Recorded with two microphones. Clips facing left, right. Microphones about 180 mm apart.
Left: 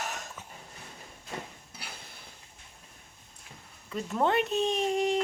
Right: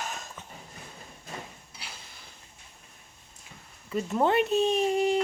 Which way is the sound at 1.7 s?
55° left (ahead or behind).